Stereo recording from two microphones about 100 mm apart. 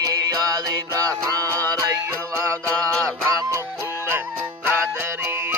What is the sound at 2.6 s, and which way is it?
Mantra, 15° left (ahead or behind).